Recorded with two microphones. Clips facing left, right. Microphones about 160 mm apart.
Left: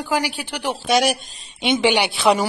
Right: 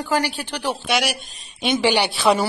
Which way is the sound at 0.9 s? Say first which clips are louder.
Left 6 dB; 45° left (ahead or behind).